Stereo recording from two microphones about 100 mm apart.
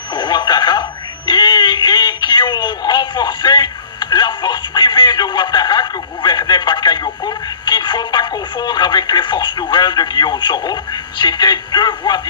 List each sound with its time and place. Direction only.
0.1 s radio: 50° left (ahead or behind)